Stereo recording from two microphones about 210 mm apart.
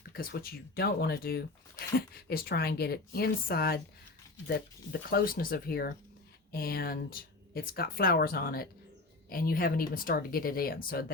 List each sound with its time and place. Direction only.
0.1 s speech: 45° left (ahead or behind)